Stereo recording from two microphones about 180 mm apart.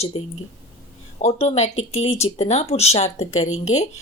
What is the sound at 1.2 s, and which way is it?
Speech, 35° left (ahead or behind).